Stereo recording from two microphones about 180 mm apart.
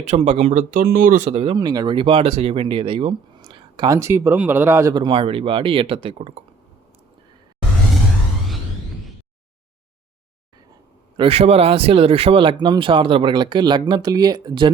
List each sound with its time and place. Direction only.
0.0 s speech: 40° right (ahead or behind)
1.3 s speech: 30° right (ahead or behind)
11.2 s speech: 35° right (ahead or behind)